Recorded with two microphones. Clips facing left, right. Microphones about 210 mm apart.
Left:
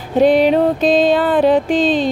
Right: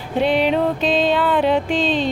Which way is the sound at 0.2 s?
40° left (ahead or behind).